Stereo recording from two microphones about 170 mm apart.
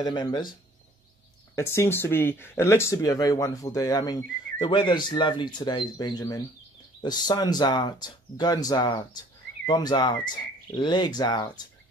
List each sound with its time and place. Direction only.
0.0 s speech: 25° left (ahead or behind)
1.5 s speech: 15° left (ahead or behind)